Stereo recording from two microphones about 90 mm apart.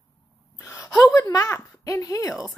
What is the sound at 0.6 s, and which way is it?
Speech, 35° left (ahead or behind).